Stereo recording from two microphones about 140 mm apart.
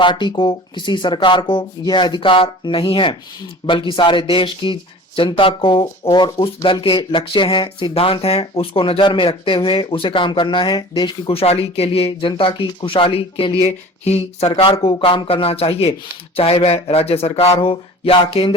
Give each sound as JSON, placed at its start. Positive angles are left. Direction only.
{"t": 0.0, "sound": "speech", "side_deg": 35}
{"t": 13.7, "sound": "speech", "side_deg": 50}